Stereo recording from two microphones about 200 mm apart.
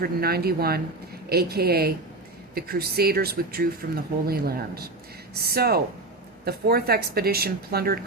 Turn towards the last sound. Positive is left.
turn(degrees=-50)  # may be behind; listen again after turning